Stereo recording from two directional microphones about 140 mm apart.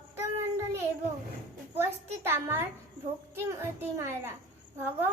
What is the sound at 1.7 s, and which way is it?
A man's voice, 15° right (ahead or behind).